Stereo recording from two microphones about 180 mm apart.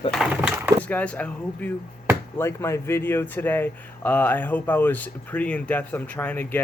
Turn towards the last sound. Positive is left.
turn(degrees=10)  # may be behind; listen again after turning